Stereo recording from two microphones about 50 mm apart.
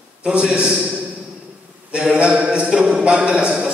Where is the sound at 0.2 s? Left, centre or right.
Centre.